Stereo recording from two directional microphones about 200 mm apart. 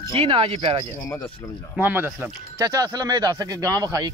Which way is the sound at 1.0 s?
10° left (ahead or behind).